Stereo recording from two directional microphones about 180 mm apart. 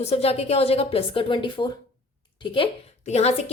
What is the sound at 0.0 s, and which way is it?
A woman's voice, 35° left (ahead or behind).